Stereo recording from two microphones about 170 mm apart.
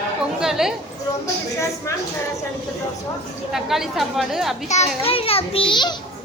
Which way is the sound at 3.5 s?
Centre (ahead or behind).